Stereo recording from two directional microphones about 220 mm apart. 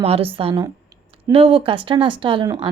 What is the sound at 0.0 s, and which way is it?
A woman's voice, 25° right (ahead or behind).